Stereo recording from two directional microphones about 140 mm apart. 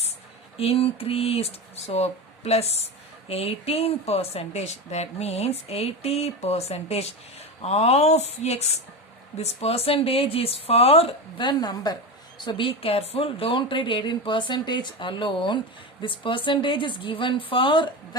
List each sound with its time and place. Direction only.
0.5 s speech: 45° left (ahead or behind)